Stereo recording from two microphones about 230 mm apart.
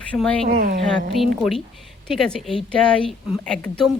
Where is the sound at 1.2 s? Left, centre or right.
Centre.